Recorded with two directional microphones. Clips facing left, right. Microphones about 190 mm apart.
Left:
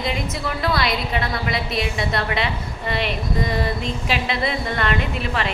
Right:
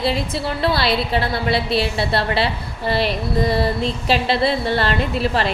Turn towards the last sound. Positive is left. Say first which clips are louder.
# right 5 dB
turn(degrees=-35)  # may be behind; listen again after turning